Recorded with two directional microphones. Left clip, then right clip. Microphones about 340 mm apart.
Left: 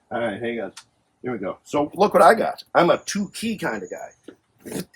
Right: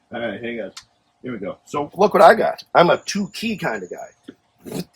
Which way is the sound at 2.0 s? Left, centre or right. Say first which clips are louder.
Right 3 dB; centre.